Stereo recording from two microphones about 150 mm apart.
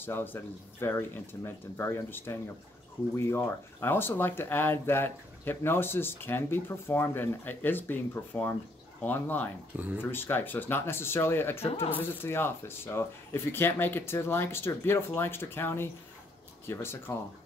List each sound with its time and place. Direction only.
0.0 s speech: 15° left (ahead or behind)
9.8 s speech: 10° right (ahead or behind)
10.1 s speech: 15° left (ahead or behind)